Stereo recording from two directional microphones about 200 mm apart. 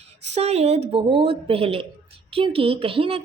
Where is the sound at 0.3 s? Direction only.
30° right (ahead or behind).